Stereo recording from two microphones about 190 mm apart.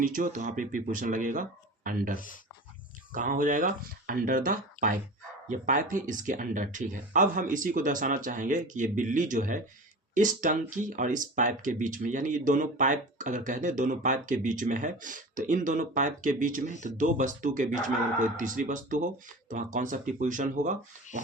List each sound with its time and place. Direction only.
0.0 s speech: 45° right (ahead or behind)
2.1 s speech: 45° left (ahead or behind)
3.1 s speech: 45° right (ahead or behind)